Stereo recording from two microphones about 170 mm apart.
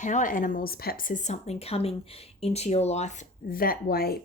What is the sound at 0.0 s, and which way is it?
Speech, 45° left (ahead or behind).